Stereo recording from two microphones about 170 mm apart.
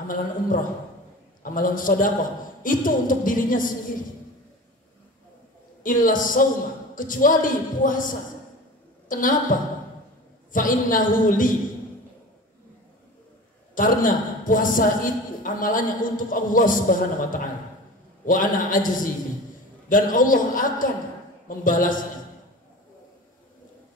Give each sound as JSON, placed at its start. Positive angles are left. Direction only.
{"t": 0.1, "sound": "a man's voice", "side_deg": 55}
{"t": 5.9, "sound": "a man's voice", "side_deg": 55}
{"t": 13.7, "sound": "a man's voice", "side_deg": 50}